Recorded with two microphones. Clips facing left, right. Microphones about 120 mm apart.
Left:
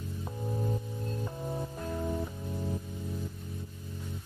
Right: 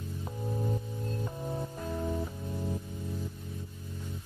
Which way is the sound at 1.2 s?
Centre (ahead or behind).